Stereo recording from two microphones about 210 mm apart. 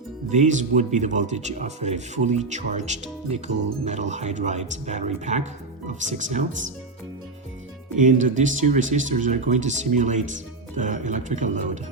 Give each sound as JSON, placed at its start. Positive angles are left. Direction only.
{"t": 0.3, "sound": "speech", "side_deg": -35}
{"t": 7.9, "sound": "speech", "side_deg": -35}